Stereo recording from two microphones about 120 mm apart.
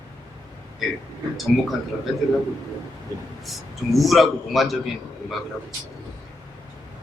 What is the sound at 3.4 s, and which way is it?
A man's voice, centre (ahead or behind).